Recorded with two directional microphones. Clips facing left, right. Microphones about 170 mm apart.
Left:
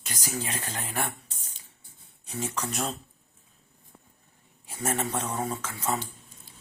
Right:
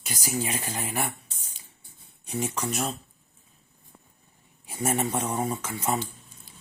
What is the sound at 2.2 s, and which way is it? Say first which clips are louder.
Speech: right 3 dB; 15° right (ahead or behind).